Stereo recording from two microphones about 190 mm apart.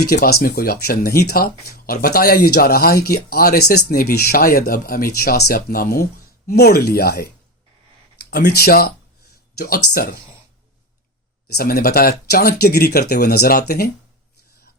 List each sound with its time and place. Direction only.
0.0 s speech: 55° left (ahead or behind)
11.5 s speech: 55° left (ahead or behind)